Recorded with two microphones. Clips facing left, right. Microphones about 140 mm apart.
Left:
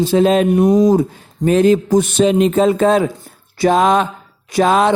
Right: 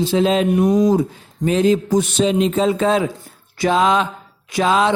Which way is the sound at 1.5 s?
55° left (ahead or behind).